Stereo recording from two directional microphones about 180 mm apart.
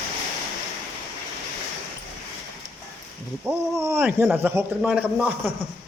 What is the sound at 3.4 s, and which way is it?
A man's voice, 15° right (ahead or behind).